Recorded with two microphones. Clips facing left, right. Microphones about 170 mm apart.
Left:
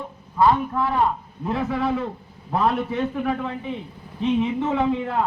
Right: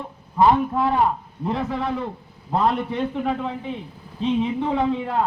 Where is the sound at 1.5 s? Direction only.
5° left (ahead or behind).